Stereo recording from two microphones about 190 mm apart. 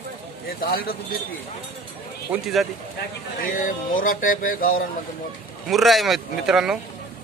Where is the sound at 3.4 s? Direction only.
45° left (ahead or behind).